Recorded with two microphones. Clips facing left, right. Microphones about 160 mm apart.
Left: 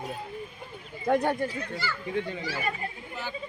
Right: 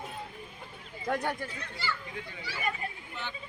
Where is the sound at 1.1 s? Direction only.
30° left (ahead or behind).